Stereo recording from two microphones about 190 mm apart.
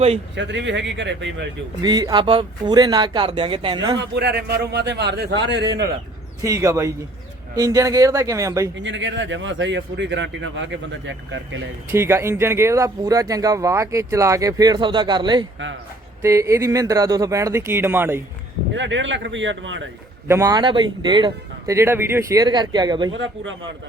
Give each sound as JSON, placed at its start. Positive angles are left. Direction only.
{"t": 0.3, "sound": "a man's voice", "side_deg": -70}
{"t": 1.8, "sound": "speech", "side_deg": -20}
{"t": 3.9, "sound": "a man's voice", "side_deg": -65}
{"t": 6.4, "sound": "speech", "side_deg": -15}
{"t": 8.7, "sound": "a man's voice", "side_deg": -75}
{"t": 11.9, "sound": "speech", "side_deg": -15}
{"t": 18.7, "sound": "a man's voice", "side_deg": -75}
{"t": 20.2, "sound": "speech", "side_deg": -15}
{"t": 23.1, "sound": "speech", "side_deg": -80}